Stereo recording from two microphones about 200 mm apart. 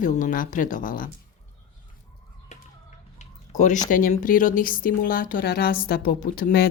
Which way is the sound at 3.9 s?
40° left (ahead or behind).